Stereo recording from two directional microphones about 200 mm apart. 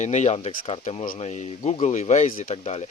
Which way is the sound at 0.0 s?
35° left (ahead or behind).